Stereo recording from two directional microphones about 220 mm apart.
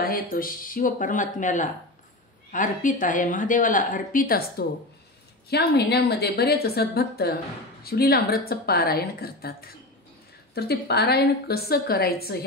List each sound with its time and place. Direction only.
0.0 s a woman's voice: 40° left (ahead or behind)